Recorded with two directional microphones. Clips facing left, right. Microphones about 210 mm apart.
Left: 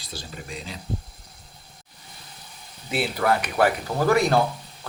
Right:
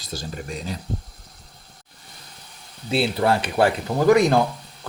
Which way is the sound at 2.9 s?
30° right (ahead or behind).